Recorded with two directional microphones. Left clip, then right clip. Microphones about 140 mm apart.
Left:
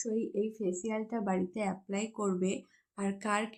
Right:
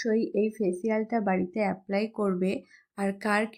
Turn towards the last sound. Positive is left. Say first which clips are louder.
# right 6 dB
turn(degrees=-30)  # may be behind; listen again after turning